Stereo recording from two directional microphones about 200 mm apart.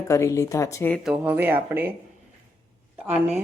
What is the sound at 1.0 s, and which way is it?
Speech, 5° right (ahead or behind).